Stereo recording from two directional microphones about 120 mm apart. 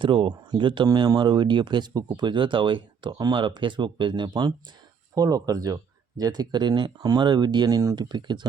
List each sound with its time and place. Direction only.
0.0 s speech: 45° right (ahead or behind)